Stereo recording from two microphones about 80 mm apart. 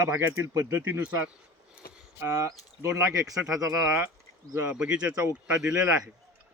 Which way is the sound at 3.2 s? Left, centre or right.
Centre.